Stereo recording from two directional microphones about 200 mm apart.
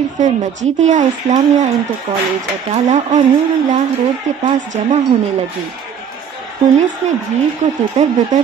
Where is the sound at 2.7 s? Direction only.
35° right (ahead or behind).